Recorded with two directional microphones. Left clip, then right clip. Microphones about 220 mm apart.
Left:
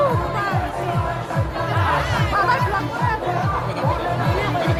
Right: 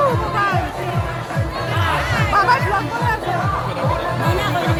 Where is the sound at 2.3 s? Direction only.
50° right (ahead or behind).